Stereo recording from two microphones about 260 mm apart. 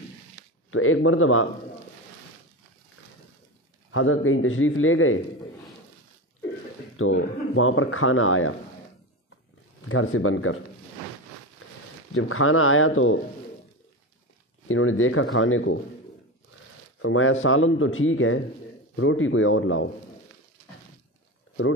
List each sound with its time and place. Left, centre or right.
0.7 s speech: left
3.9 s speech: left
7.0 s speech: left
9.8 s speech: left
12.1 s speech: left
14.7 s speech: left
17.0 s speech: left